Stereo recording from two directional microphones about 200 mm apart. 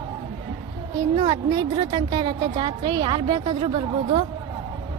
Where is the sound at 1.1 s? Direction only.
30° right (ahead or behind).